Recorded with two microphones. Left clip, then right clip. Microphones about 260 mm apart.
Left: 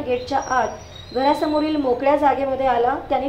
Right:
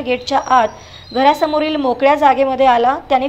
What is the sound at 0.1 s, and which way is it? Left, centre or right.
A woman's voice, right.